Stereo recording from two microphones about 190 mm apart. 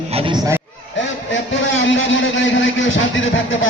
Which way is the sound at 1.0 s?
75° left (ahead or behind).